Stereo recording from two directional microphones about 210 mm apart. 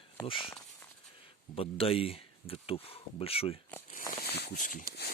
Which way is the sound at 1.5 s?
25° left (ahead or behind).